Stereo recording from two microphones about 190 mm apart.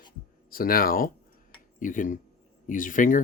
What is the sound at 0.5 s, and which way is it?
Speech, 50° left (ahead or behind).